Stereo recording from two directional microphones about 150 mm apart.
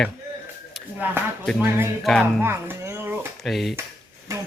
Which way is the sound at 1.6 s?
15° right (ahead or behind).